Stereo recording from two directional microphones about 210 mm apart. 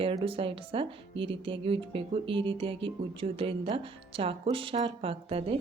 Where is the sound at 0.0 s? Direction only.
25° right (ahead or behind).